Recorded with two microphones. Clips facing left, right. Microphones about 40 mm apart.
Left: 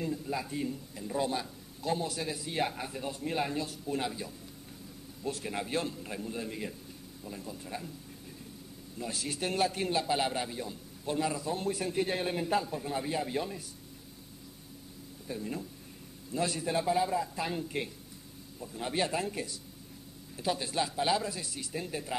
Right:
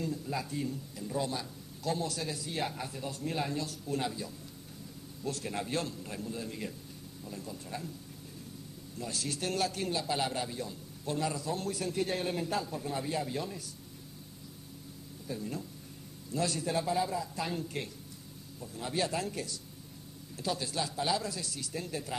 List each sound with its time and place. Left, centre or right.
0.0 s a man's voice: left
8.9 s a man's voice: centre
15.2 s a man's voice: centre